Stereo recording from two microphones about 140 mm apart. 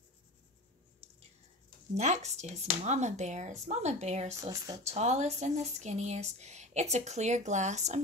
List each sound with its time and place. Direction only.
2.0 s speech: 55° right (ahead or behind)
4.4 s speech: 25° right (ahead or behind)
4.8 s speech: 50° right (ahead or behind)